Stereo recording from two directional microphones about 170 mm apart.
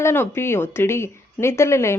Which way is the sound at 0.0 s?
15° left (ahead or behind).